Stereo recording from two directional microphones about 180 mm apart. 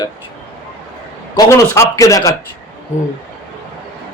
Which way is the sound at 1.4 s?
15° left (ahead or behind).